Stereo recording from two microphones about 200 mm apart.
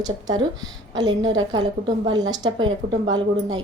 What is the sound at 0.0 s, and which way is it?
Speech, 20° right (ahead or behind).